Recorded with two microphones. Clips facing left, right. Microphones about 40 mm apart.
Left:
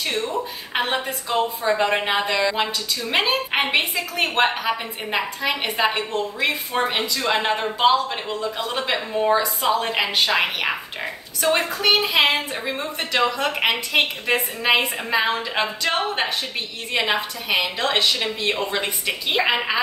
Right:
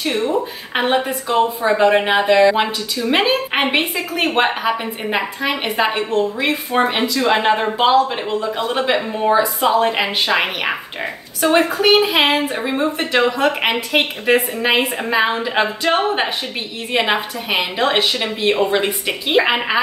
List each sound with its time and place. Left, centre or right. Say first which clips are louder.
0.3 s a woman's voice: right 6 dB; centre
1.8 s a woman's voice: right 9 dB; centre
7.2 s a woman's voice: right 7 dB; right
7.8 s a woman's voice: right 3 dB; centre